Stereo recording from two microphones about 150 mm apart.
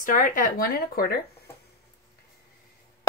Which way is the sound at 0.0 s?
65° left (ahead or behind).